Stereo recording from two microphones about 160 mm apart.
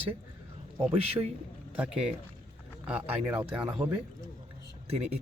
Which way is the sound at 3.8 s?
25° right (ahead or behind).